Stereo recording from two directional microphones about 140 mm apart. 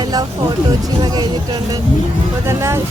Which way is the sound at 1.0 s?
30° right (ahead or behind).